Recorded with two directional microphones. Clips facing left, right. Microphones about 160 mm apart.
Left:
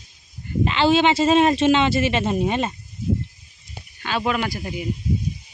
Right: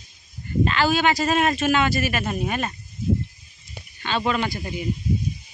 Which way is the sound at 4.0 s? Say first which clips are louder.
Even; 10° left (ahead or behind).